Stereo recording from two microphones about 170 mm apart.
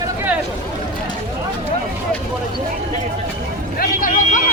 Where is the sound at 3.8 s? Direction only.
50° left (ahead or behind).